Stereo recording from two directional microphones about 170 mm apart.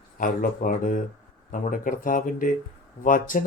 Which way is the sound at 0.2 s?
55° left (ahead or behind).